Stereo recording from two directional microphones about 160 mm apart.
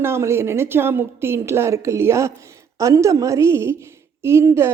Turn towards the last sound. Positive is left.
turn(degrees=-15)  # may be behind; listen again after turning